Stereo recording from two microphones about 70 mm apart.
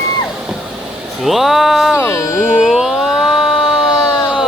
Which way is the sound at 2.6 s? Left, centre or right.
Centre.